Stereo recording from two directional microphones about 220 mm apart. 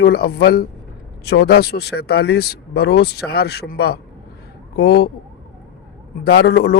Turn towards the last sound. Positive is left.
turn(degrees=50)  # may be behind; listen again after turning